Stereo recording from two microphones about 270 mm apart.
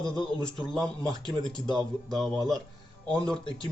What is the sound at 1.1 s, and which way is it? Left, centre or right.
Speech, centre.